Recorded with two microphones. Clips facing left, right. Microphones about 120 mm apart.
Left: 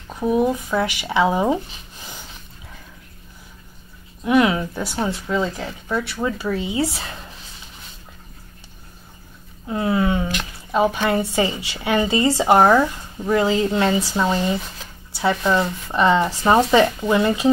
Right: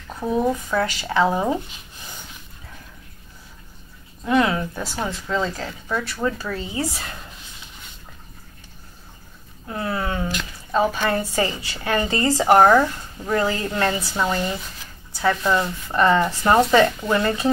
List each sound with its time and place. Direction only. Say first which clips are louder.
0.2 s speech: left 3 dB; 15° left (ahead or behind)
4.2 s speech: left 3 dB; 15° left (ahead or behind)
5.9 s speech: left 2 dB; centre (ahead or behind)
6.2 s speech: left 2 dB; 20° left (ahead or behind)
9.7 s a sound: left 6 dB; 15° left (ahead or behind)
10.7 s speech: left 2 dB; 20° left (ahead or behind)
12.5 s speech: right 1 dB; 5° left (ahead or behind)